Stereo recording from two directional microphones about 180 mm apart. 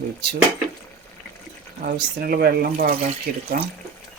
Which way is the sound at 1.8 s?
55° right (ahead or behind).